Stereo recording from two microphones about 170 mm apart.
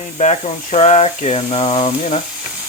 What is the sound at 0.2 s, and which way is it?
Speech, 40° left (ahead or behind).